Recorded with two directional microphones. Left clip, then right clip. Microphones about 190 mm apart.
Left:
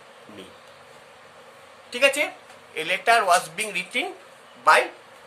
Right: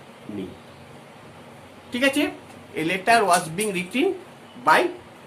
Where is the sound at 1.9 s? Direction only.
30° left (ahead or behind).